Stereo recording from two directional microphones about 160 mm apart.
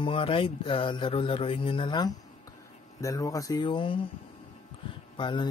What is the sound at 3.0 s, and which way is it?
Speech, 20° left (ahead or behind).